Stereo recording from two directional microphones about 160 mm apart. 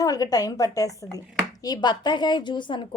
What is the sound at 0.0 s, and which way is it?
A woman's voice, 20° left (ahead or behind).